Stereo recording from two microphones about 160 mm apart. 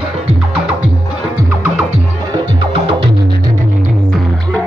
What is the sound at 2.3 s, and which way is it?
Music, 30° right (ahead or behind).